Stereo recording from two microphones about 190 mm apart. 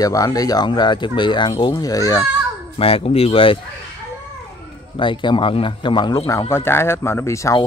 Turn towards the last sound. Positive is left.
turn(degrees=15)  # may be behind; listen again after turning